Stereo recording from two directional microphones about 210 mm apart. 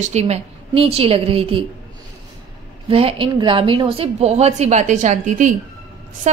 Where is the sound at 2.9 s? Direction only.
25° right (ahead or behind).